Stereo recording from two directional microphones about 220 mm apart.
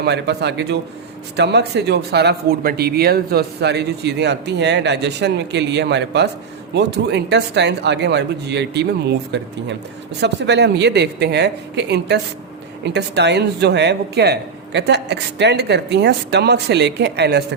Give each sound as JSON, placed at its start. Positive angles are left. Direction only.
{"t": 0.0, "sound": "speech", "side_deg": -50}